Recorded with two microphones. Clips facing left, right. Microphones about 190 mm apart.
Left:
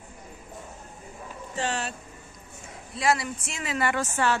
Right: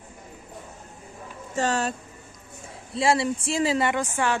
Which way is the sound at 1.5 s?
40° right (ahead or behind).